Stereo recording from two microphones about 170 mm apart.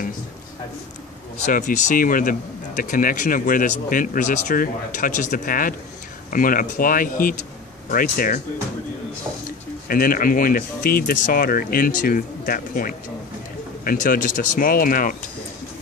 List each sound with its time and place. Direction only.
1.4 s speech: 50° left (ahead or behind)
9.8 s speech: 60° left (ahead or behind)